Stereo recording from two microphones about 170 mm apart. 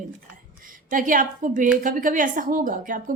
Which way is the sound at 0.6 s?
55° right (ahead or behind).